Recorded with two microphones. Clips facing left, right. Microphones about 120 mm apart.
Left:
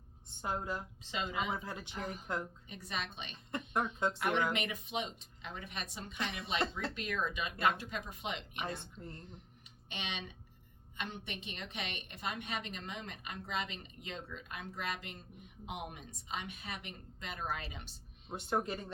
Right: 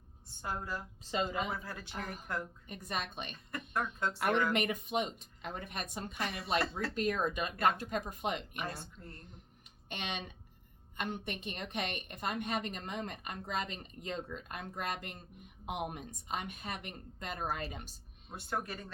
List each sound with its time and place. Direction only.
0.4 s speech: 20° left (ahead or behind)
1.0 s speech: 40° right (ahead or behind)
1.5 s speech: 20° left (ahead or behind)
1.9 s a woman's voice: 55° right (ahead or behind)
3.5 s speech: 20° left (ahead or behind)
4.5 s a woman's voice: 50° right (ahead or behind)
8.6 s speech: 25° left (ahead or behind)
9.9 s a woman's voice: 50° right (ahead or behind)
18.3 s speech: 20° left (ahead or behind)